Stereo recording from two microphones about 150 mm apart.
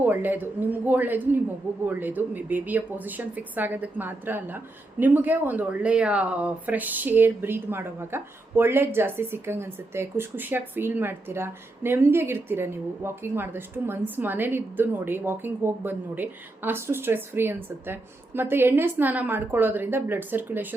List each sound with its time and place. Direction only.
0.0 s a woman's voice: 15° right (ahead or behind)